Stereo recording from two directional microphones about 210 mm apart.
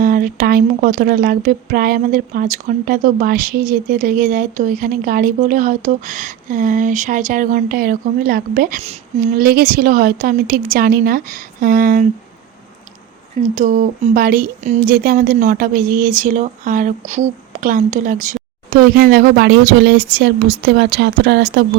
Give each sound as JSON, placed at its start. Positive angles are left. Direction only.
{"t": 0.0, "sound": "speech", "side_deg": -40}
{"t": 13.6, "sound": "speech", "side_deg": -40}